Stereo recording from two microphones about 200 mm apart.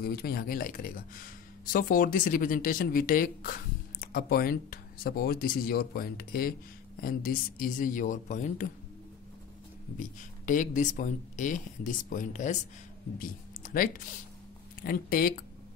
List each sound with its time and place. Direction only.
0.0 s speech: 50° left (ahead or behind)
9.9 s speech: 40° left (ahead or behind)